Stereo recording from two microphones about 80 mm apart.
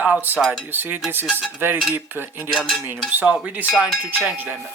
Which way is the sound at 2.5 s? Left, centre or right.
Centre.